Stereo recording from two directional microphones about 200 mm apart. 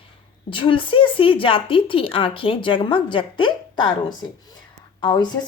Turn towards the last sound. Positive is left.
turn(degrees=20)  # may be behind; listen again after turning